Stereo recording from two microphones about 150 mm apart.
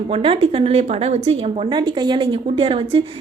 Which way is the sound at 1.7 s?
30° right (ahead or behind).